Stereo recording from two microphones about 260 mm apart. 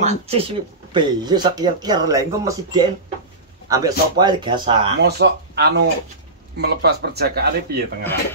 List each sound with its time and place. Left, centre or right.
0.0 s speech: right
5.0 s speech: right